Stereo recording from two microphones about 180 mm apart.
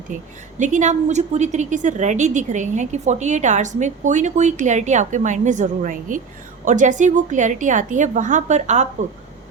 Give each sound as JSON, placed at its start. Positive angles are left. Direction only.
{"t": 0.6, "sound": "a woman's voice", "side_deg": -40}